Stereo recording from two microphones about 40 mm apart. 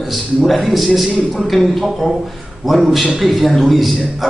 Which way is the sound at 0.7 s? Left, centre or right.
Centre.